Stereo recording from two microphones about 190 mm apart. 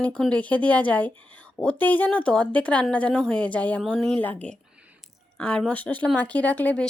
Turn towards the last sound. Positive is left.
turn(degrees=5)  # may be behind; listen again after turning